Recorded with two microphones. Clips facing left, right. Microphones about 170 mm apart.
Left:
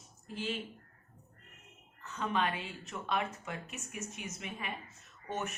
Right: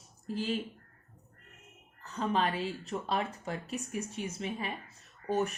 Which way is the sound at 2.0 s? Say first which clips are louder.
Right 3 dB; 35° right (ahead or behind).